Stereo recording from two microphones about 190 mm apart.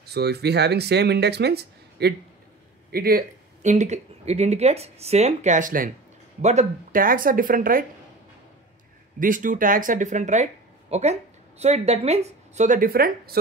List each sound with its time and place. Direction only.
0.0 s speech: 60° right (ahead or behind)
2.9 s a sound: 55° right (ahead or behind)
3.7 s speech: 35° right (ahead or behind)
9.2 s speech: 45° right (ahead or behind)